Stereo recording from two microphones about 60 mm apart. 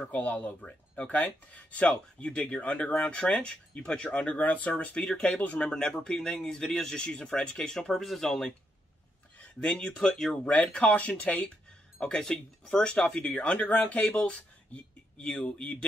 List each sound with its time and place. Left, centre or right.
0.0 s speech: left; by 8.5 s centre
9.7 s speech: centre
10.5 s speech: centre
14.0 s speech: centre